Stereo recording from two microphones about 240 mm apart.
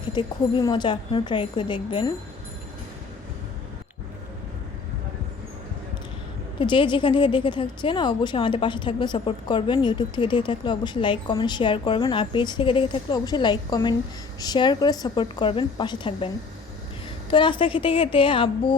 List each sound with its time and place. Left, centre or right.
0.0 s a woman's voice: centre
6.6 s a woman's voice: centre
17.3 s a woman's voice: centre